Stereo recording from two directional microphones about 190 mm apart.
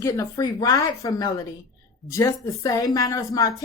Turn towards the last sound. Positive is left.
turn(degrees=20)  # may be behind; listen again after turning